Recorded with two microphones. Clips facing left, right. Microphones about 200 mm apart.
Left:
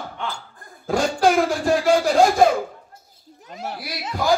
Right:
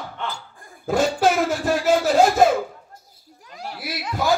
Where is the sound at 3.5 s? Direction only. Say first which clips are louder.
Left 1 dB; 25° left (ahead or behind).